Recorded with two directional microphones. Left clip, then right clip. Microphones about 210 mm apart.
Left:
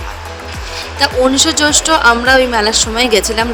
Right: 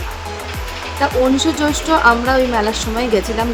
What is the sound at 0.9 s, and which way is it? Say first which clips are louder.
Speech: left 4 dB; 40° left (ahead or behind).